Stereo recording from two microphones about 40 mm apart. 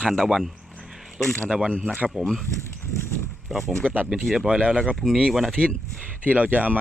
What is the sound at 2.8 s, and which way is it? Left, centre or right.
Clip-clop, left.